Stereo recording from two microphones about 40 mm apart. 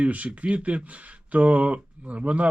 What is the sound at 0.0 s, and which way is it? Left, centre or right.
Speech, right.